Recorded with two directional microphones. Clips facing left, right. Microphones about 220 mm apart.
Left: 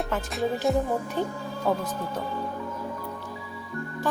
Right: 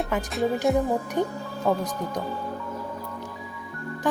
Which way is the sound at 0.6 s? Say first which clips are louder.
Right 2 dB; centre (ahead or behind).